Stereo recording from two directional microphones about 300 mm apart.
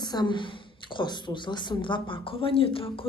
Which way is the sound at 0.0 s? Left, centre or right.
Centre.